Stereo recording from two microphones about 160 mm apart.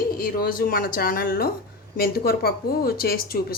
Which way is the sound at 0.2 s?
65° left (ahead or behind).